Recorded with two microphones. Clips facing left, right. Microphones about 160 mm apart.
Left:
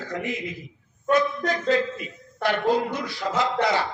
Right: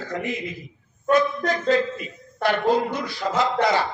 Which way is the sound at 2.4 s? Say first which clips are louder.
Right 2 dB; 40° right (ahead or behind).